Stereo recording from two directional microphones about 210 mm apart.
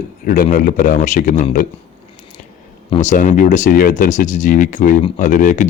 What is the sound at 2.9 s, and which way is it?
Speech, 35° left (ahead or behind).